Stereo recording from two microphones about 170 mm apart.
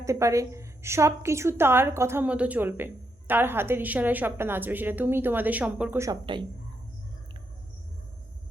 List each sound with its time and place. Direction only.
0.0 s a woman's voice: 20° right (ahead or behind)
6.1 s speech: 30° right (ahead or behind)